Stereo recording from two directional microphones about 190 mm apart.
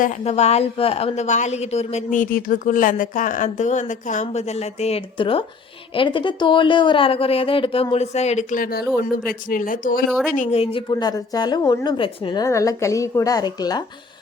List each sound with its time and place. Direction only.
0.0 s a woman's voice: 35° left (ahead or behind)
10.1 s speech: centre (ahead or behind)
10.3 s a woman's voice: 35° left (ahead or behind); by 13.8 s 20° left (ahead or behind)